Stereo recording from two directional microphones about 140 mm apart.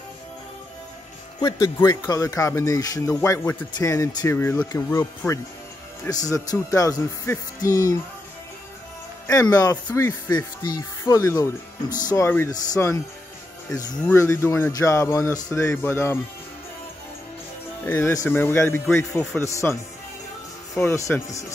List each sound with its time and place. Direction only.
1.4 s a man's voice: 25° left (ahead or behind)
9.3 s speech: 25° left (ahead or behind)
10.3 s speech: 30° left (ahead or behind)
14.0 s speech: 20° left (ahead or behind)
17.8 s a man's voice: 15° left (ahead or behind)
20.9 s speech: 20° left (ahead or behind)